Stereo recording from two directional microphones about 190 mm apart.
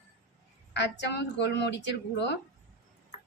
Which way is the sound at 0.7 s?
65° left (ahead or behind).